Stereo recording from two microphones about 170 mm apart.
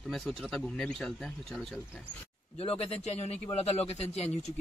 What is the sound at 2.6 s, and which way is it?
A man's voice, 35° left (ahead or behind).